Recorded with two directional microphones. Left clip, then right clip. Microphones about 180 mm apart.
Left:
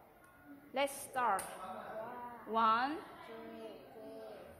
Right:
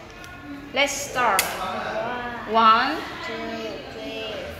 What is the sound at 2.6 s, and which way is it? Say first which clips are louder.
Speech: right 15 dB; 50° left (ahead or behind).